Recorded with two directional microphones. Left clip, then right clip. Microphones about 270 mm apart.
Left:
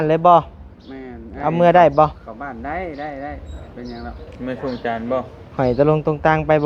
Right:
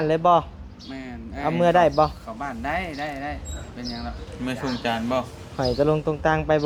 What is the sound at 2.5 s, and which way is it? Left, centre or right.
Speech, right.